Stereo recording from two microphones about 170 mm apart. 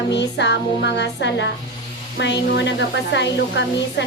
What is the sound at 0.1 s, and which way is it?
A woman's voice, 90° left.